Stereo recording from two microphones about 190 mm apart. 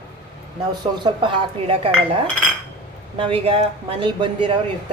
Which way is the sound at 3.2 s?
30° right (ahead or behind).